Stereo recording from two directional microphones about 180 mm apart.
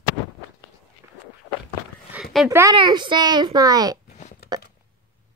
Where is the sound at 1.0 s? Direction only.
15° right (ahead or behind).